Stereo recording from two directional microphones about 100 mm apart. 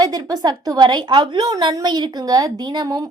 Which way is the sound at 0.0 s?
40° right (ahead or behind).